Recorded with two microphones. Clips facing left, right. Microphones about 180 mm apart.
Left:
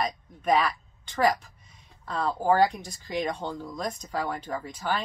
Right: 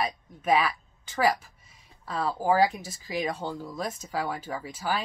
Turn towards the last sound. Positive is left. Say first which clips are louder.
# left 1 dB
turn(degrees=-5)  # may be behind; listen again after turning